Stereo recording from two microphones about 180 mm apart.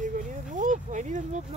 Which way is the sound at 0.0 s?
45° right (ahead or behind).